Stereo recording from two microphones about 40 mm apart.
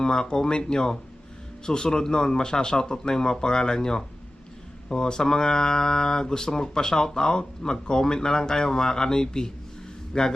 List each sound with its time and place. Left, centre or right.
0.0 s speech: centre